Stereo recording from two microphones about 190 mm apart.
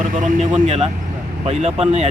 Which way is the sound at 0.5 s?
30° right (ahead or behind).